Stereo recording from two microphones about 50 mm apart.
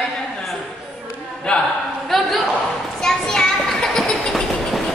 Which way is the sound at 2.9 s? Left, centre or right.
Centre.